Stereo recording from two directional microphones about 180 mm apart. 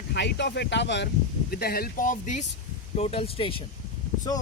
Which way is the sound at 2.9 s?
35° left (ahead or behind).